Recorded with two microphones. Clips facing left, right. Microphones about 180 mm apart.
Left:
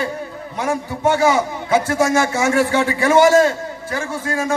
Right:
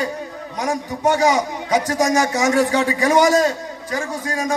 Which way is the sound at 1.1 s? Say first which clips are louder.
Left 1 dB; 15° right (ahead or behind).